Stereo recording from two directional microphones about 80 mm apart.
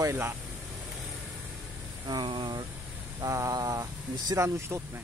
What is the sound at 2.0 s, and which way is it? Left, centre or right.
Speech, right.